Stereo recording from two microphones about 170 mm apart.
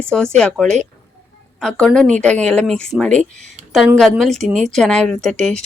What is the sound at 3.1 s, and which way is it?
Speech, 45° right (ahead or behind).